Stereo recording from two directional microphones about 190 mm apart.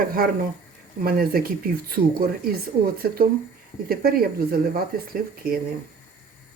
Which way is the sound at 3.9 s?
55° right (ahead or behind).